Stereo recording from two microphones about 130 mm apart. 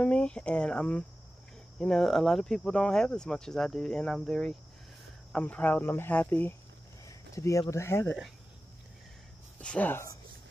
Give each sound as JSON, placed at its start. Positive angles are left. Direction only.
{"t": 0.0, "sound": "cricket", "side_deg": 10}
{"t": 1.8, "sound": "speech", "side_deg": 5}
{"t": 5.3, "sound": "cricket", "side_deg": 10}
{"t": 7.1, "sound": "a sound", "side_deg": 25}
{"t": 7.7, "sound": "speech", "side_deg": 20}
{"t": 9.6, "sound": "cricket", "side_deg": 10}